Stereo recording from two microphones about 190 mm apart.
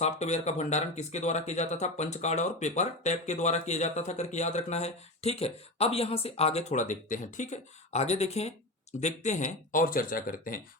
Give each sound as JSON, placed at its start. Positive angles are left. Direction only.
{"t": 0.0, "sound": "speech", "side_deg": 35}